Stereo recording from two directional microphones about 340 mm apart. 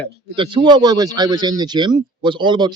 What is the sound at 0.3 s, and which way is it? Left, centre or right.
Speech, centre.